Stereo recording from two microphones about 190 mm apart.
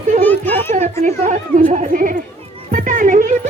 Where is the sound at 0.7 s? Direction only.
40° right (ahead or behind).